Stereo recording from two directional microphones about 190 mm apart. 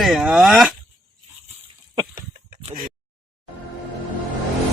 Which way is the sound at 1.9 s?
20° right (ahead or behind).